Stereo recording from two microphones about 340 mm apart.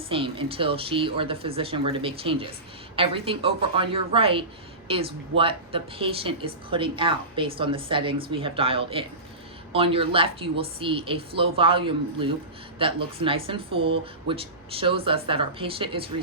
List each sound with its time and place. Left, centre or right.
0.1 s speech: centre